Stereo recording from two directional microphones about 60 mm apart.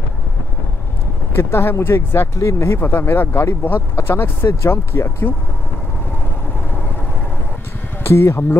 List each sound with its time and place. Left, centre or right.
1.3 s speech: left
2.4 s speech: left
2.8 s speech: left
8.0 s speech: left